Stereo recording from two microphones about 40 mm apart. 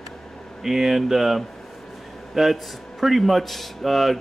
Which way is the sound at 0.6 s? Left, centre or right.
Centre.